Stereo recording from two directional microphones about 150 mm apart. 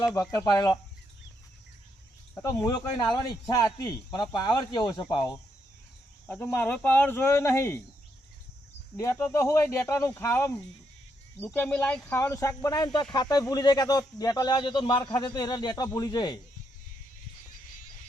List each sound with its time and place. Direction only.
0.0 s speech: 20° left (ahead or behind)
2.3 s speech: 25° left (ahead or behind)
6.2 s speech: 15° left (ahead or behind)
9.0 s speech: 20° left (ahead or behind)